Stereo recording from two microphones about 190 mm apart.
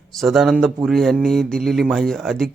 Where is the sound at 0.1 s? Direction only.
Centre (ahead or behind).